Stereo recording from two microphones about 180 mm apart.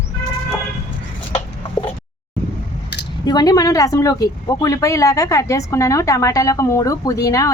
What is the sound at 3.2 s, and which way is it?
Speech, 20° left (ahead or behind).